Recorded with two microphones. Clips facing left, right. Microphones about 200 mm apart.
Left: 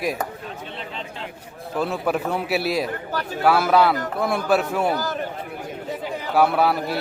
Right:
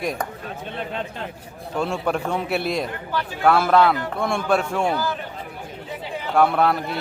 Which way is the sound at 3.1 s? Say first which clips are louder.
Even; 45° left (ahead or behind).